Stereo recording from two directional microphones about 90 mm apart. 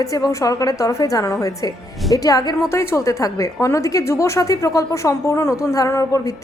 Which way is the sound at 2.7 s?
30° left (ahead or behind).